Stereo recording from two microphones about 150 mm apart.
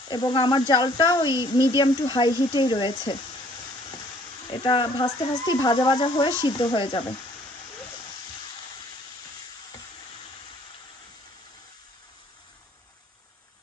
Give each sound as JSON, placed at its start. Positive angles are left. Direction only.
{"t": 0.0, "sound": "speech", "side_deg": 30}
{"t": 4.6, "sound": "speech", "side_deg": 30}